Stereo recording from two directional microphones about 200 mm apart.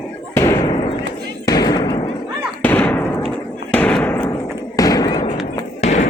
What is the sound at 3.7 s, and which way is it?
Slam, 5° left (ahead or behind).